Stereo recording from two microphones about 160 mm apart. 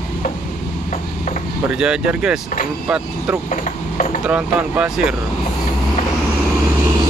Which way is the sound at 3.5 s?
50° left (ahead or behind).